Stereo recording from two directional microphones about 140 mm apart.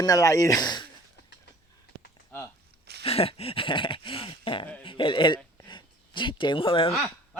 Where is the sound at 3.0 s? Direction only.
45° left (ahead or behind).